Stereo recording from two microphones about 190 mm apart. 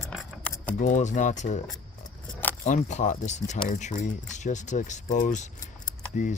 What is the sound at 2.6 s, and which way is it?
Speech, 40° left (ahead or behind).